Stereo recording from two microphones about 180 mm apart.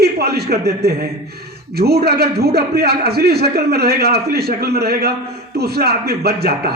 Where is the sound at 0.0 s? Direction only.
60° right (ahead or behind).